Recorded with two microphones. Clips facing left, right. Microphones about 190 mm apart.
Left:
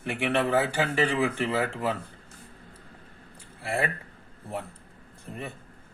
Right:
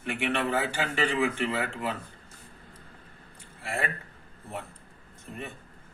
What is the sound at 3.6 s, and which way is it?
Speech, 35° left (ahead or behind).